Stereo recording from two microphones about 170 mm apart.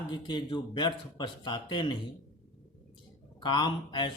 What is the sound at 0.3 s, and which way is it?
Speech, 30° left (ahead or behind).